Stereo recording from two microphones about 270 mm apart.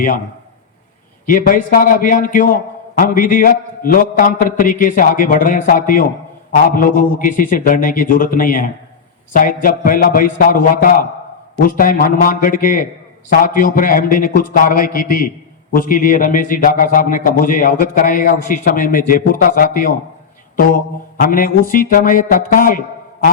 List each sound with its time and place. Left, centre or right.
1.3 s a man's voice: left
21.2 s a man's voice: left